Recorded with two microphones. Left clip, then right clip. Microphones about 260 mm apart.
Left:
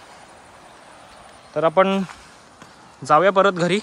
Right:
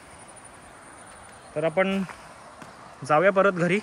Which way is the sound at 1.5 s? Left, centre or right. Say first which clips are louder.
Left 7 dB; centre.